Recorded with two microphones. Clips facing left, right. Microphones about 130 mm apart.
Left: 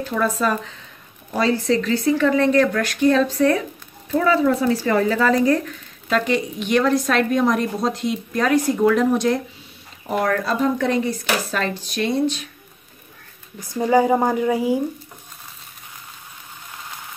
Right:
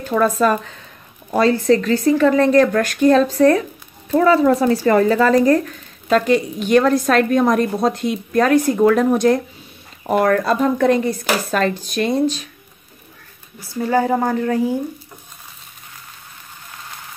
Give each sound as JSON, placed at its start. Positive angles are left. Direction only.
{"t": 0.1, "sound": "a woman's voice", "side_deg": -50}
{"t": 13.6, "sound": "speech", "side_deg": 15}